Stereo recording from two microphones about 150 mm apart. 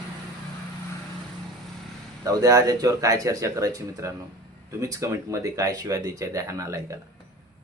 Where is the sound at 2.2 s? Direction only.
25° right (ahead or behind).